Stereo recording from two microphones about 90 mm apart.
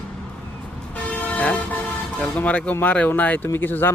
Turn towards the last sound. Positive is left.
turn(degrees=25)  # may be behind; listen again after turning